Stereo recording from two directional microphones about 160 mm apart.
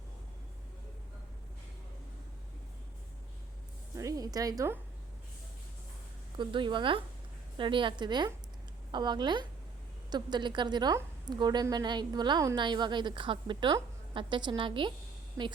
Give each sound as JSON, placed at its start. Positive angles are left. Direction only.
{"t": 3.9, "sound": "a woman's voice", "side_deg": -20}
{"t": 6.3, "sound": "a woman's voice", "side_deg": -30}